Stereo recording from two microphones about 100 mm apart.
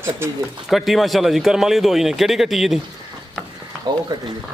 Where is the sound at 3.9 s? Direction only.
45° right (ahead or behind).